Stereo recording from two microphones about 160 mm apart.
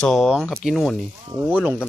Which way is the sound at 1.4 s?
10° right (ahead or behind).